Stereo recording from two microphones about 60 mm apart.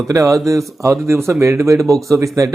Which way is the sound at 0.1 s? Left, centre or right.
Right.